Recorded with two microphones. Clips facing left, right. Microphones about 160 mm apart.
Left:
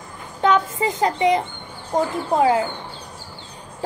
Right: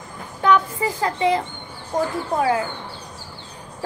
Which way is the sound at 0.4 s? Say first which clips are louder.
Even; 20° left (ahead or behind).